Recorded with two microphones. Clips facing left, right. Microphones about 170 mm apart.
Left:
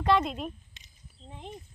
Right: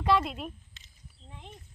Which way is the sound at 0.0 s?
5° right (ahead or behind).